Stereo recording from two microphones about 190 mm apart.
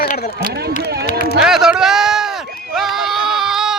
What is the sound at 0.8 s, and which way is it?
Run, 60° right (ahead or behind).